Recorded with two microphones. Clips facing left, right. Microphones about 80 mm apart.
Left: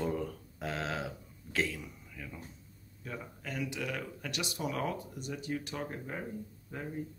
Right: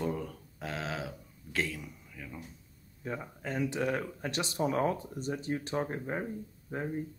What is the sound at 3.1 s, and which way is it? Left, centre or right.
Speech, right.